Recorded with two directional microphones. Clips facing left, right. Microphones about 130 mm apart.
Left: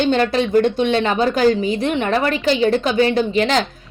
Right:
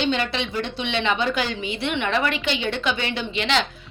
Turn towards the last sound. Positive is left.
turn(degrees=40)  # may be behind; listen again after turning